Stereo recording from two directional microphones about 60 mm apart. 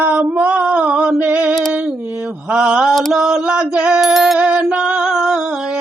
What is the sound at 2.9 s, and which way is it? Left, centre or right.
Mantra, centre.